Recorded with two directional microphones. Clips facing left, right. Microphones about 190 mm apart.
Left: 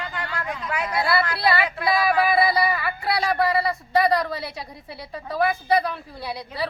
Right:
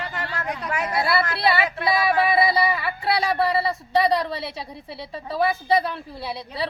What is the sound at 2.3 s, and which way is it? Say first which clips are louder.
Speech: even; 25° right (ahead or behind).